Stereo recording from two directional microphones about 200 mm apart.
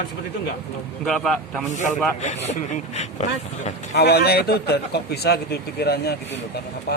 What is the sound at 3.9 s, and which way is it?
A man's voice, 55° left (ahead or behind).